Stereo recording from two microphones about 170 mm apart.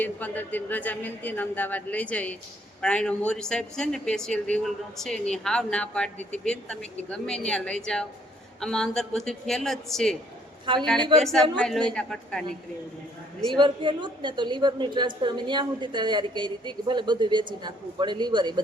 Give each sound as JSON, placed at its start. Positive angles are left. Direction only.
{"t": 0.0, "sound": "a woman's voice", "side_deg": 10}
{"t": 13.6, "sound": "a woman's voice", "side_deg": -30}